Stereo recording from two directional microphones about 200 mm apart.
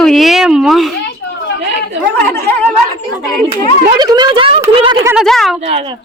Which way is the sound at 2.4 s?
10° left (ahead or behind).